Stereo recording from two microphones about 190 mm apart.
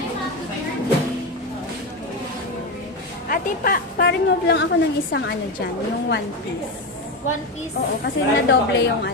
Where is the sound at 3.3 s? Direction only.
50° left (ahead or behind).